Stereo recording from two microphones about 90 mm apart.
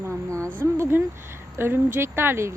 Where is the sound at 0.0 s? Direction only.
30° right (ahead or behind).